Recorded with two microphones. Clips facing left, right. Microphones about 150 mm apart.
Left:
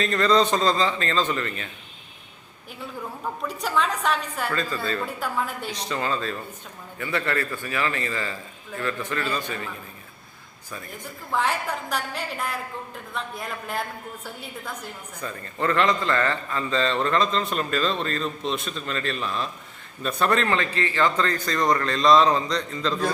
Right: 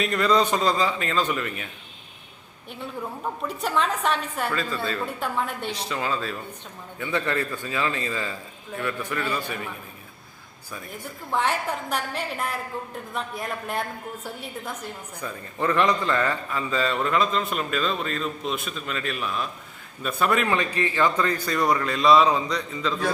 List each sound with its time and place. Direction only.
0.0 s a man's voice: 10° right (ahead or behind)
3.4 s a woman's voice: centre (ahead or behind)
7.0 s a man's voice: 15° right (ahead or behind)
11.3 s a woman's voice: centre (ahead or behind)
15.2 s a man's voice: 10° right (ahead or behind)